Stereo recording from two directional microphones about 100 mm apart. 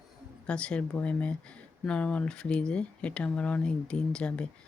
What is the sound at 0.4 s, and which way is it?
Speech, 10° left (ahead or behind).